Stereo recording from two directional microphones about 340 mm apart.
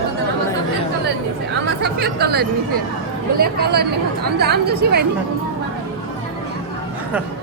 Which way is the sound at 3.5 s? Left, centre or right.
Right.